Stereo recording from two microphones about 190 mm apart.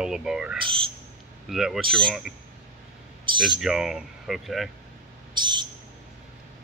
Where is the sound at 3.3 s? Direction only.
25° right (ahead or behind).